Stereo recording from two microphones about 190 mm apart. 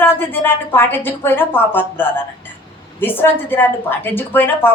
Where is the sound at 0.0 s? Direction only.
10° left (ahead or behind).